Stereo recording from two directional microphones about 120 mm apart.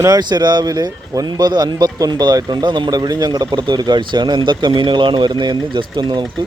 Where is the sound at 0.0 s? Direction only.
35° right (ahead or behind).